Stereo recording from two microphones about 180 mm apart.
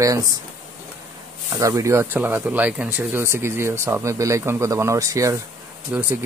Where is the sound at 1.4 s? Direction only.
20° right (ahead or behind).